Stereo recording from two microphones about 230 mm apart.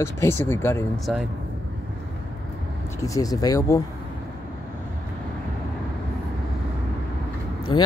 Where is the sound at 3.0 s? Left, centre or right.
Centre.